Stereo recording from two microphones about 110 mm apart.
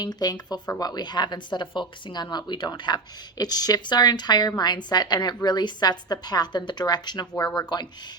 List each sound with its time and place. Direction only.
0.0 s speech: 40° left (ahead or behind)